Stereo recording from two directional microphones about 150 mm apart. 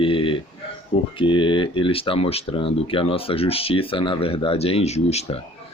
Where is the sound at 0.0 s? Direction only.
35° left (ahead or behind).